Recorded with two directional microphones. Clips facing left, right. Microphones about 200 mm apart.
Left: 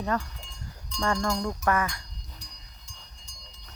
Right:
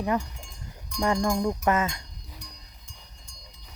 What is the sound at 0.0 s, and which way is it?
Cowbell, 15° right (ahead or behind).